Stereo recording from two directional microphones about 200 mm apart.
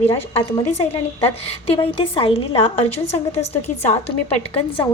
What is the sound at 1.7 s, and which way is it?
A woman's voice, 25° left (ahead or behind).